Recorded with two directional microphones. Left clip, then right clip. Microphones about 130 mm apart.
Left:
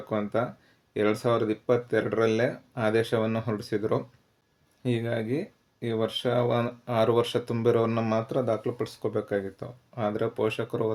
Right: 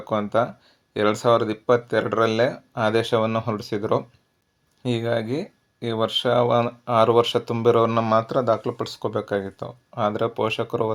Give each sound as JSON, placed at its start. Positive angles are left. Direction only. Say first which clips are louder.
{"t": 0.1, "sound": "speech", "louder": "right 7 dB", "side_deg": -30}
{"t": 8.1, "sound": "speech", "louder": "right 7 dB", "side_deg": -45}